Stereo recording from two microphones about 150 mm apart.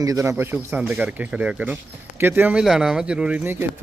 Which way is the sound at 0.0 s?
20° right (ahead or behind).